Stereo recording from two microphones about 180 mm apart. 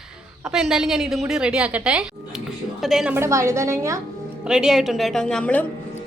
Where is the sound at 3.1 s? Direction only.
15° right (ahead or behind).